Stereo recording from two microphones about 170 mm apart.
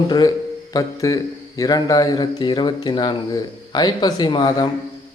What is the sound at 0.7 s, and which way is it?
A man's voice, 20° left (ahead or behind).